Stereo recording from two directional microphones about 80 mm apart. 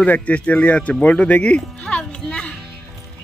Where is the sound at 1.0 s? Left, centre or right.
Centre.